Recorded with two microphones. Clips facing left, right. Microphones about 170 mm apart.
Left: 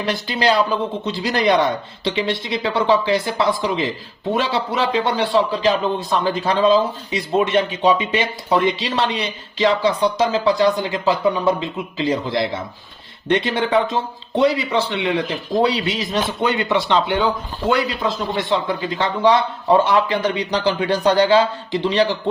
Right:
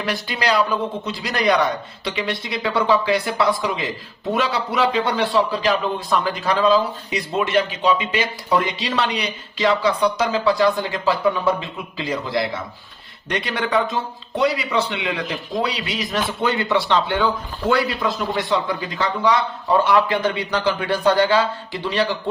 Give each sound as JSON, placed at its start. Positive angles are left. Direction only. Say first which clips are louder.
{"t": 0.0, "sound": "speech", "louder": "left 4 dB", "side_deg": 25}